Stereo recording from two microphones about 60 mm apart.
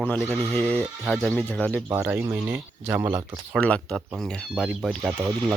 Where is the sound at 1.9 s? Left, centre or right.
Right.